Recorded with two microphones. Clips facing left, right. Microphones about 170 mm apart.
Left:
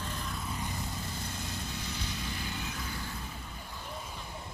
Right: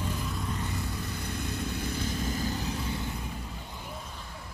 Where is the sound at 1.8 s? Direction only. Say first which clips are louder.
Right 7 dB; 50° right (ahead or behind).